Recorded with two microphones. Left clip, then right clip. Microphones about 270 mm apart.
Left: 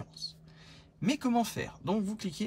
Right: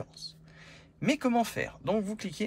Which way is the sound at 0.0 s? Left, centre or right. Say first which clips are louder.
Even; centre.